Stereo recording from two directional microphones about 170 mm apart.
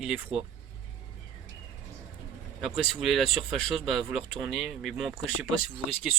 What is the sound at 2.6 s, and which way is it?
Speech, centre (ahead or behind).